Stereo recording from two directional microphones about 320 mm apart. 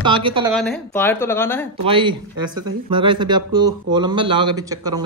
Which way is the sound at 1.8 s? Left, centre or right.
Centre.